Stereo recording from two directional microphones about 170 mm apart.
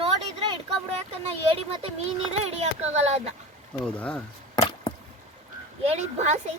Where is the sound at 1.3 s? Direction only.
30° right (ahead or behind).